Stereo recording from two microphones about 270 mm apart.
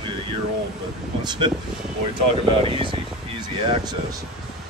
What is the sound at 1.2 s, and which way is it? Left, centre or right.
Speech, centre.